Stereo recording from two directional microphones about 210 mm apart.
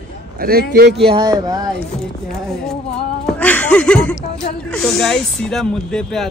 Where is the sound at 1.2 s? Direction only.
15° right (ahead or behind).